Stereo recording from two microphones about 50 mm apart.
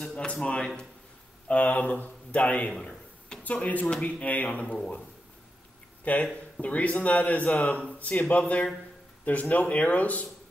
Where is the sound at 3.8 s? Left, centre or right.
Centre.